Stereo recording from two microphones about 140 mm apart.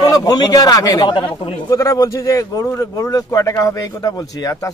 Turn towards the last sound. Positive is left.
turn(degrees=25)  # may be behind; listen again after turning